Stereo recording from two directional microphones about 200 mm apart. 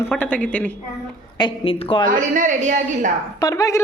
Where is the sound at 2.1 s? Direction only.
40° right (ahead or behind).